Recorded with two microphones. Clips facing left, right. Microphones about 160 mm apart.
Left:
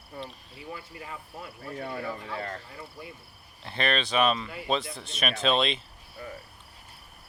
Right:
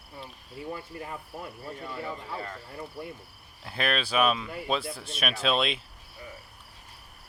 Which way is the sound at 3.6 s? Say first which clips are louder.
Left 1 dB; 5° right (ahead or behind).